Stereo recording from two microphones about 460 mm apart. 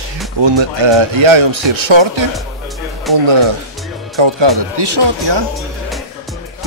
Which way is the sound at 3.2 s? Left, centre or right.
Right.